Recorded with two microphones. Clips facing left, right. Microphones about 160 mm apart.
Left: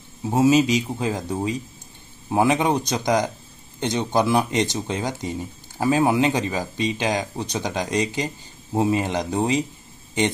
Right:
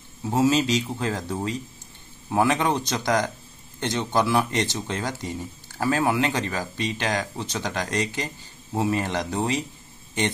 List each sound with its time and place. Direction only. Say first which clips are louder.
0.2 s speech: left 4 dB; 15° left (ahead or behind)